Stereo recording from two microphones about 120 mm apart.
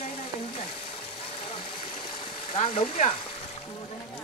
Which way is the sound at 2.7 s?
60° left (ahead or behind).